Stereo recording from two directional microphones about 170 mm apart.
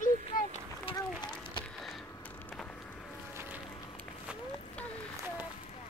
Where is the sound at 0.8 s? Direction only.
25° left (ahead or behind).